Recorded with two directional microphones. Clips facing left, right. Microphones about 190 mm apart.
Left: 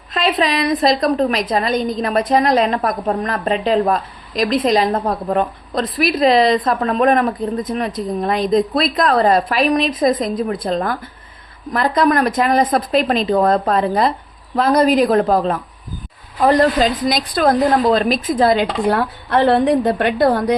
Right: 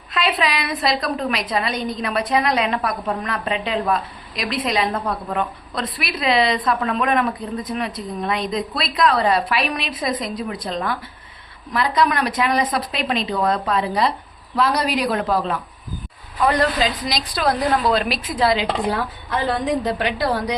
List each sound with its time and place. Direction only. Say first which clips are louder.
0.1 s a woman's voice: left 4 dB; 40° left (ahead or behind); by 20.6 s 55° left (ahead or behind)